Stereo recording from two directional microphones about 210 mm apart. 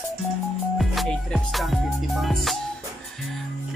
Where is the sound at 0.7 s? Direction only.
Centre (ahead or behind).